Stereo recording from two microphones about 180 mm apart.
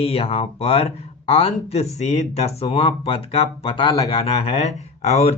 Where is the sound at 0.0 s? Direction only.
35° left (ahead or behind).